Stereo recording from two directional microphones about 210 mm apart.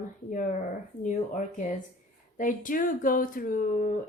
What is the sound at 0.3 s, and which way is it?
Speech, 40° left (ahead or behind).